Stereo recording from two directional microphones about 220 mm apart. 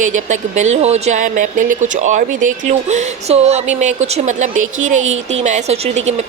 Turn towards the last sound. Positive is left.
turn(degrees=-30)  # may be behind; listen again after turning